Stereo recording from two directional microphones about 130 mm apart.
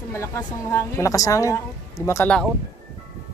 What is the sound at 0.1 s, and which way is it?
A woman's voice, 20° left (ahead or behind).